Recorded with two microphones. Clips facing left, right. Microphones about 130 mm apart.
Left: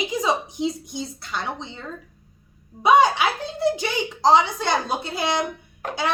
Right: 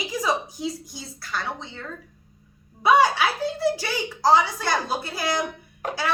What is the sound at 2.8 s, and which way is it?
A woman's voice, 20° left (ahead or behind).